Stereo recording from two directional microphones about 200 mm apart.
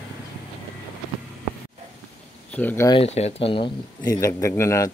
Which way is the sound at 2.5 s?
10° left (ahead or behind).